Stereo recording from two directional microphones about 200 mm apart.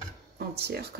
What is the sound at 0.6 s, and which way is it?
Speech, 55° right (ahead or behind).